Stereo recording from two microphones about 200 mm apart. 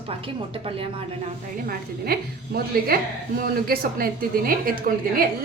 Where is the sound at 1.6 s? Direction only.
50° right (ahead or behind).